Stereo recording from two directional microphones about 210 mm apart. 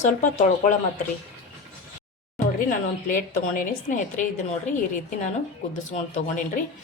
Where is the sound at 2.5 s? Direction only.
40° left (ahead or behind).